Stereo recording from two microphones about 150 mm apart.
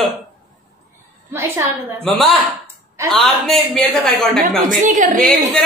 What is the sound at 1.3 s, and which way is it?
Speech, 15° right (ahead or behind).